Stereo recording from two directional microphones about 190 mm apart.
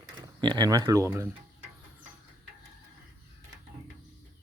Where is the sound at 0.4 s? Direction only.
20° right (ahead or behind).